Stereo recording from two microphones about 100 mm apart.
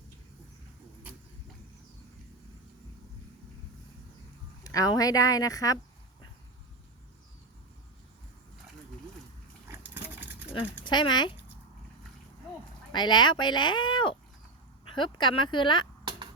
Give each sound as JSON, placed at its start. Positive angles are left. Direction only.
{"t": 4.6, "sound": "speech", "side_deg": 35}
{"t": 9.6, "sound": "dog", "side_deg": -20}
{"t": 10.8, "sound": "speech", "side_deg": 50}
{"t": 12.9, "sound": "speech", "side_deg": 50}
{"t": 16.0, "sound": "music", "side_deg": -50}